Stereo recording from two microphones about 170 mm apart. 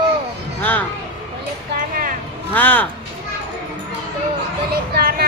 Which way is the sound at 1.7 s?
55° right (ahead or behind).